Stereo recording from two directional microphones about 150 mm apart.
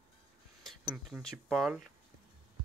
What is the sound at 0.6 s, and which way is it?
Speech, centre (ahead or behind).